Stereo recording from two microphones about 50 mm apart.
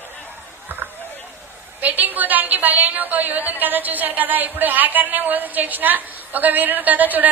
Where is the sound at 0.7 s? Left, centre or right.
Right.